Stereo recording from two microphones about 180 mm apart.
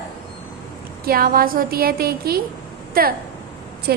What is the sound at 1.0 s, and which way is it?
A woman's voice, 55° right (ahead or behind).